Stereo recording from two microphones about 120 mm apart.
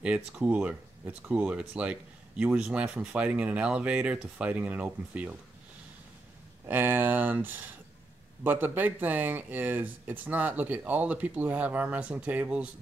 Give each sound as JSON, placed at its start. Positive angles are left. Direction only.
{"t": 0.0, "sound": "speech", "side_deg": -10}
{"t": 6.6, "sound": "speech", "side_deg": -15}